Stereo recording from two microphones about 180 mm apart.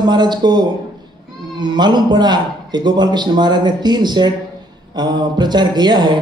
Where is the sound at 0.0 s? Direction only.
25° right (ahead or behind).